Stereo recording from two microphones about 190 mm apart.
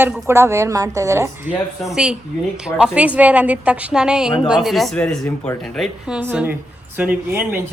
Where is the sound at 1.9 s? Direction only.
5° right (ahead or behind).